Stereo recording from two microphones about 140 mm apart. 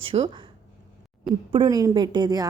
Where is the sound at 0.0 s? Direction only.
40° right (ahead or behind).